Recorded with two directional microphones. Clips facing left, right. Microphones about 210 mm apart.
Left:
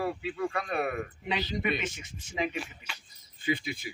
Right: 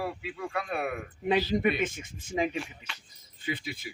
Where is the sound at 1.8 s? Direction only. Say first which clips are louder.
Right 5 dB; 50° right (ahead or behind).